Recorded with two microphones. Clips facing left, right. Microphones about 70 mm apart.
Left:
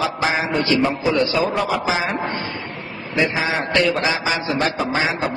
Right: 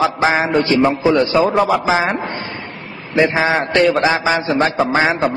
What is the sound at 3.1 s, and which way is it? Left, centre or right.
A man's voice, right.